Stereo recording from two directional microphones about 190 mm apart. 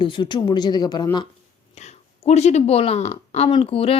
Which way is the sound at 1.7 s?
35° left (ahead or behind).